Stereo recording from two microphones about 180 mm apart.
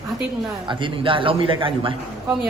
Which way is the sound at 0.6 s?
25° right (ahead or behind).